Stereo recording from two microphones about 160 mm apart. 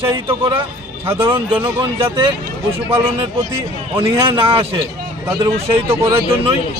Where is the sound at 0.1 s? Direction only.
30° right (ahead or behind).